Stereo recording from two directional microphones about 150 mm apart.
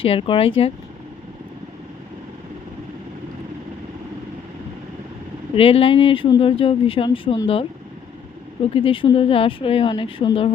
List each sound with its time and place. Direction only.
0.0 s speech: 35° left (ahead or behind)
5.5 s speech: 40° left (ahead or behind)
8.7 s speech: 35° left (ahead or behind)